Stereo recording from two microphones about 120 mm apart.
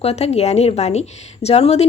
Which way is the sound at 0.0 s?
60° left (ahead or behind).